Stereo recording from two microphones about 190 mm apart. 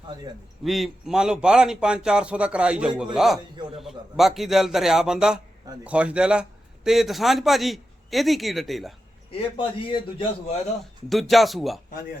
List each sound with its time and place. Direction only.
0.6 s a man's voice: centre (ahead or behind)
9.3 s a man's voice: 30° left (ahead or behind)
11.1 s a man's voice: centre (ahead or behind)